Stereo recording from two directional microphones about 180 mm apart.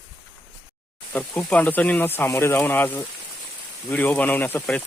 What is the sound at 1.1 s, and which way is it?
Speech, 10° left (ahead or behind).